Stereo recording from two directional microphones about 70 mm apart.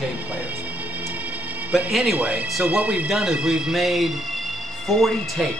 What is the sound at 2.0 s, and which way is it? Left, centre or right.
A man's voice, centre.